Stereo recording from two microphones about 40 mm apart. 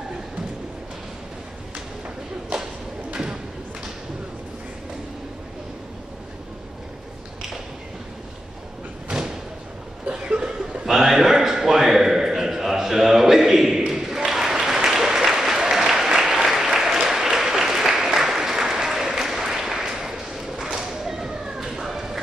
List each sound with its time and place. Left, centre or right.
2.5 s thump: right
10.0 s chuckle: right
10.9 s a sound: centre
17.0 s applause: centre